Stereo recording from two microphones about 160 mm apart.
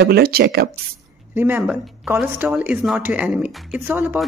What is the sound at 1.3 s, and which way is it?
A woman's voice, 10° right (ahead or behind).